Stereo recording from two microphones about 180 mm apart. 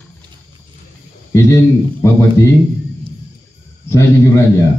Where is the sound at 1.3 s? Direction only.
15° left (ahead or behind).